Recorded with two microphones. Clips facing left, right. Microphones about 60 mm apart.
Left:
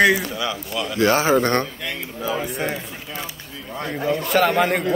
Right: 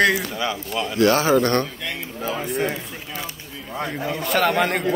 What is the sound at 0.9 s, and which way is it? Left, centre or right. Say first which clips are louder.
Speech: even; left.